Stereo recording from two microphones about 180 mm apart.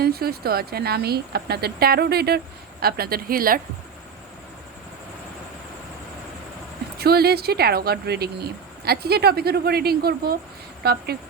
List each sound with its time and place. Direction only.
0.0 s speech: 60° right (ahead or behind)
7.0 s speech: 60° right (ahead or behind)